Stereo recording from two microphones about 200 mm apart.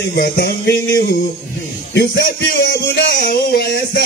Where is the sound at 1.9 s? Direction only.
55° left (ahead or behind).